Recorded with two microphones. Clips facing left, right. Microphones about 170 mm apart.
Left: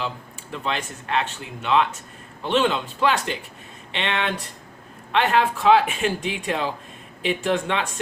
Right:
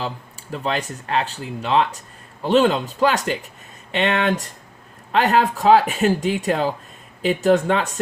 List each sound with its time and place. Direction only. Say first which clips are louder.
0.5 s speech: right 4 dB; 40° right (ahead or behind)